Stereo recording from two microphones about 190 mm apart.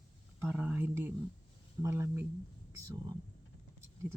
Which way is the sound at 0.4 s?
10° right (ahead or behind).